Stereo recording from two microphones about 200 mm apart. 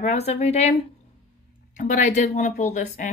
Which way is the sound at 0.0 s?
30° left (ahead or behind).